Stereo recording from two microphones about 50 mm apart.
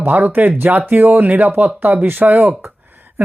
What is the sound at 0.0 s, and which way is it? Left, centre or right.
Speech, right.